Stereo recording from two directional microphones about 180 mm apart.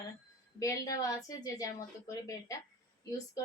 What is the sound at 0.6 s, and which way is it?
Speech, 20° left (ahead or behind).